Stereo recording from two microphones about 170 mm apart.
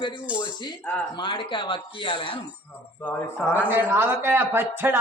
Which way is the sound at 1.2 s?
30° left (ahead or behind).